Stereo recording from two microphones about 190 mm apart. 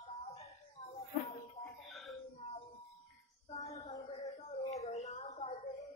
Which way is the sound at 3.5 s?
35° left (ahead or behind).